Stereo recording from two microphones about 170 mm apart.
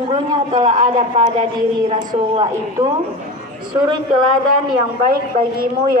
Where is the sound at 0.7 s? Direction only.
45° right (ahead or behind).